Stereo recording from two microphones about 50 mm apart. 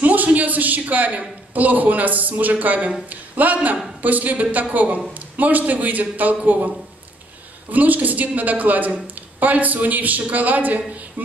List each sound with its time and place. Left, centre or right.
0.0 s a sound: right
1.5 s a woman's voice: right
7.7 s a woman's voice: right